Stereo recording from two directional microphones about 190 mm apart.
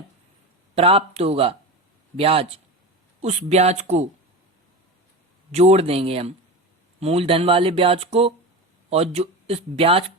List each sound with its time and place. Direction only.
0.8 s speech: 30° right (ahead or behind)
5.5 s speech: 35° right (ahead or behind)